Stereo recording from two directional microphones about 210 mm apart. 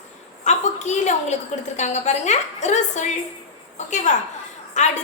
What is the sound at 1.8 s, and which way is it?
Child singing, 35° left (ahead or behind).